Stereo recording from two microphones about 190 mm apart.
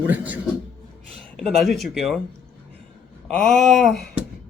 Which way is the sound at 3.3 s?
5° left (ahead or behind).